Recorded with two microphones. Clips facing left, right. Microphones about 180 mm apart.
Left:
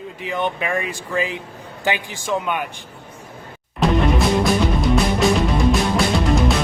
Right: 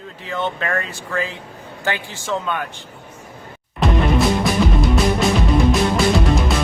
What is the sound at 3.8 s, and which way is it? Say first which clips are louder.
Music: even; centre (ahead or behind).